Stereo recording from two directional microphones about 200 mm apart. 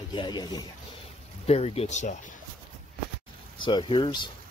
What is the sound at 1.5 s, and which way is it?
Speech, 30° left (ahead or behind).